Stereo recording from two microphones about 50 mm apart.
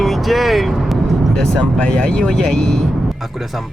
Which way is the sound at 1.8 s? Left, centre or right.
Left.